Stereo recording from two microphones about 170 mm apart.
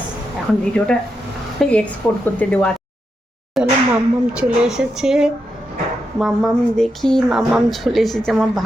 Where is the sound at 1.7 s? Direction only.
10° left (ahead or behind).